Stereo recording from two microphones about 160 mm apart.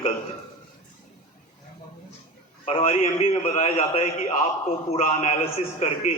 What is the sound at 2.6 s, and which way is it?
A man's voice, 40° left (ahead or behind).